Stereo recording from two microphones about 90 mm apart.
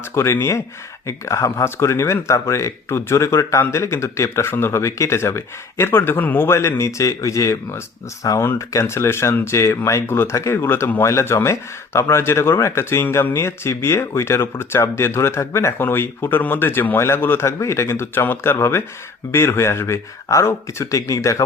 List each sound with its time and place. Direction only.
0.1 s speech: 30° left (ahead or behind)